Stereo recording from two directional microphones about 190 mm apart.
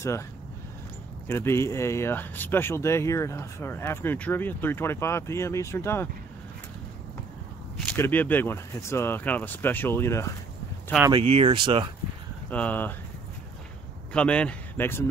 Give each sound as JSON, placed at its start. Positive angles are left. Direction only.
{"t": 1.2, "sound": "speech", "side_deg": 15}
{"t": 8.0, "sound": "speech", "side_deg": 10}
{"t": 11.1, "sound": "speech", "side_deg": -30}
{"t": 12.4, "sound": "speech", "side_deg": 10}
{"t": 14.1, "sound": "speech", "side_deg": 5}